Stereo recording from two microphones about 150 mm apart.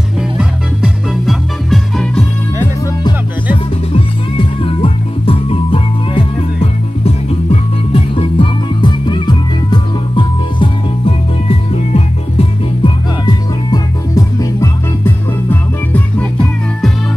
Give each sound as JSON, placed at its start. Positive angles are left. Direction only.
{"t": 0.4, "sound": "music", "side_deg": -5}
{"t": 3.9, "sound": "music", "side_deg": 35}
{"t": 13.2, "sound": "music", "side_deg": 25}
{"t": 15.5, "sound": "music", "side_deg": 10}